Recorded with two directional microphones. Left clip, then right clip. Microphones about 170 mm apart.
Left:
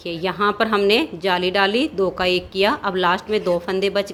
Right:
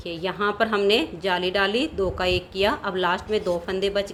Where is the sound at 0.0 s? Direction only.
25° left (ahead or behind).